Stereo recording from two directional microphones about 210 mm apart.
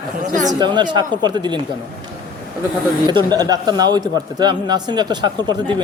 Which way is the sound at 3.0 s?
20° right (ahead or behind).